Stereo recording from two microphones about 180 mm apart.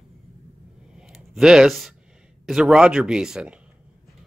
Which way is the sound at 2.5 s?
5° right (ahead or behind).